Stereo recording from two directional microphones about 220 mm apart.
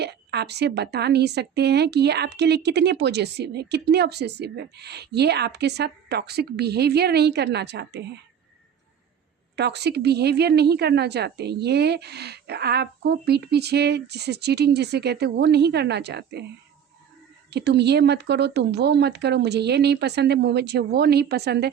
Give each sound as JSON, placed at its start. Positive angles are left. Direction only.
{"t": 0.0, "sound": "a woman's voice", "side_deg": -50}
{"t": 9.6, "sound": "a woman's voice", "side_deg": -50}
{"t": 17.5, "sound": "a woman's voice", "side_deg": -50}